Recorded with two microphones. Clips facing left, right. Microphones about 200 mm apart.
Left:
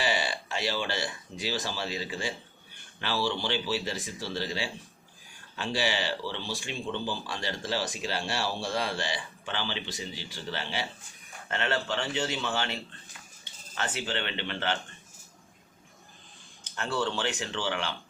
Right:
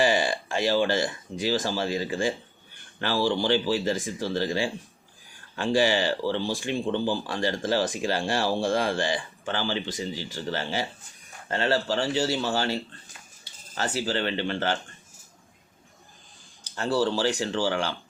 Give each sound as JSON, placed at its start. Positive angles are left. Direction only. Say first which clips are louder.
{"t": 0.0, "sound": "speech", "louder": "right 7 dB", "side_deg": -45}
{"t": 16.6, "sound": "speech", "louder": "right 6 dB", "side_deg": -35}